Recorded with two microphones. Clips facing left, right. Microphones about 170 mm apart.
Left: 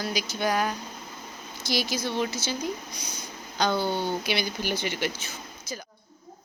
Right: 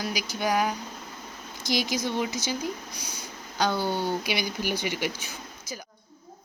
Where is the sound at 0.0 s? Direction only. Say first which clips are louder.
Left 1 dB; 10° right (ahead or behind).